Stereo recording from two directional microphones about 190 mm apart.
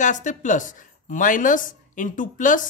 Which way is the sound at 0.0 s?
40° left (ahead or behind).